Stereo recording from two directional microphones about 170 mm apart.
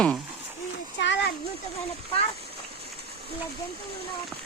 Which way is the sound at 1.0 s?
90° left.